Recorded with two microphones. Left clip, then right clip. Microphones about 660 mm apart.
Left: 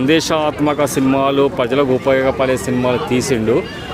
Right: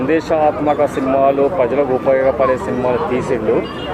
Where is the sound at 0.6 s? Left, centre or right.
Left.